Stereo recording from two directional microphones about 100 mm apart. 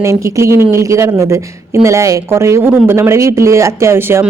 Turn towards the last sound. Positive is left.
turn(degrees=-25)  # may be behind; listen again after turning